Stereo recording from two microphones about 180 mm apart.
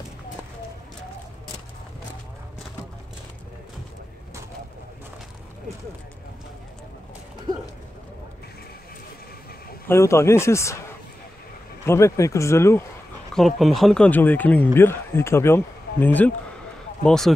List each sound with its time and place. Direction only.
9.8 s speech: 15° left (ahead or behind)
11.8 s speech: 15° left (ahead or behind)
13.3 s speech: centre (ahead or behind)